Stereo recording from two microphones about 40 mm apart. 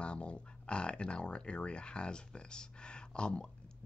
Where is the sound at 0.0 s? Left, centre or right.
Left.